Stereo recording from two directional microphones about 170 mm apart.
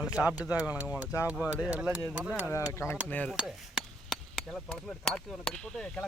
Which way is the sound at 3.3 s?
Centre (ahead or behind).